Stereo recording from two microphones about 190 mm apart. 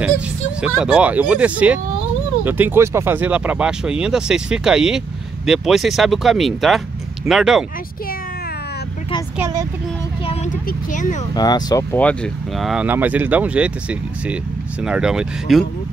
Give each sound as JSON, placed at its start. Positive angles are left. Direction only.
{"t": 0.6, "sound": "speech", "side_deg": -5}
{"t": 9.4, "sound": "speech", "side_deg": -20}
{"t": 10.2, "sound": "speech", "side_deg": 40}
{"t": 11.3, "sound": "speech", "side_deg": 20}
{"t": 12.0, "sound": "speech", "side_deg": 5}